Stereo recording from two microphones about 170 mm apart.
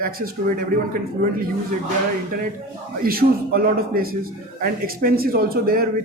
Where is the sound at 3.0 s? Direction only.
60° right (ahead or behind).